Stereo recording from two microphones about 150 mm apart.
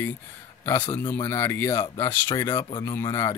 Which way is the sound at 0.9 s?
15° left (ahead or behind).